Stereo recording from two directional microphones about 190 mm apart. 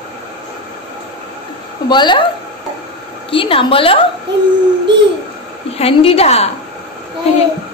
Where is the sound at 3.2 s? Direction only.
30° left (ahead or behind).